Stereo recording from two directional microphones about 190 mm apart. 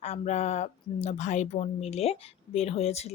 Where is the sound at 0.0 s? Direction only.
35° left (ahead or behind).